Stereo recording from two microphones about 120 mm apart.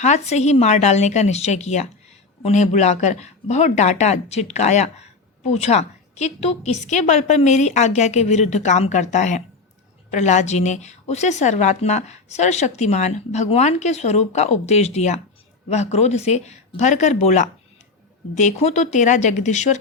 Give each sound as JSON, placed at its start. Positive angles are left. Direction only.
{"t": 0.0, "sound": "speech", "side_deg": 75}
{"t": 10.1, "sound": "speech", "side_deg": 75}